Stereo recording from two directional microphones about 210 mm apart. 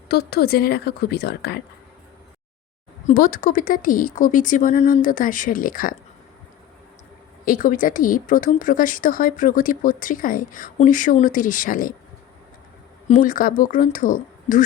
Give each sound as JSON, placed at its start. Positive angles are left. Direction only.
{"t": 0.1, "sound": "a woman's voice", "side_deg": 50}
{"t": 3.1, "sound": "speech", "side_deg": 40}
{"t": 7.4, "sound": "speech", "side_deg": 40}
{"t": 13.1, "sound": "speech", "side_deg": 40}